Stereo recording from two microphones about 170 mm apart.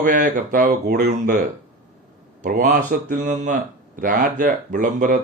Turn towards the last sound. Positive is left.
turn(degrees=-50)  # may be behind; listen again after turning